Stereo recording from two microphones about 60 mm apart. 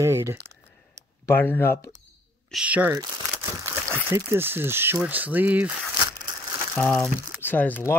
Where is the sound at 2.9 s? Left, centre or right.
Right.